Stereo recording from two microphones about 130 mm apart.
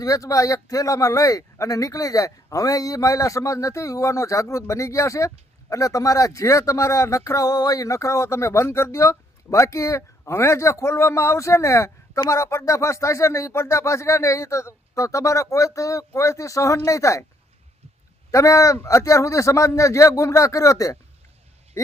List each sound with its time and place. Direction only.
0.0 s speech: 25° left (ahead or behind)
18.3 s speech: 25° left (ahead or behind)
21.7 s a sound: 20° left (ahead or behind)